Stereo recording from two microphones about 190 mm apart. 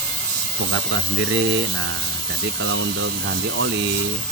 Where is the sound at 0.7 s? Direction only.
85° right.